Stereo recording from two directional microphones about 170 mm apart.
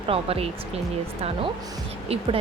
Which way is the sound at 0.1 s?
35° right (ahead or behind).